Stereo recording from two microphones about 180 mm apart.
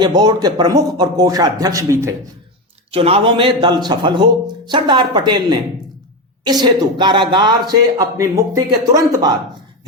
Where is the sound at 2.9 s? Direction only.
35° right (ahead or behind).